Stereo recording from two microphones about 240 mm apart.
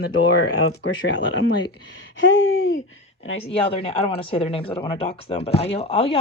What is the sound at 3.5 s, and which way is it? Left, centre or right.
Speech, left.